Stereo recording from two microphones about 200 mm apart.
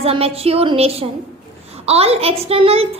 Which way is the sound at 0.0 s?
30° right (ahead or behind).